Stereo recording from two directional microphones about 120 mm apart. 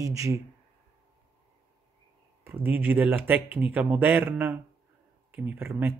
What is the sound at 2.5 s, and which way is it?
Speech, 15° right (ahead or behind).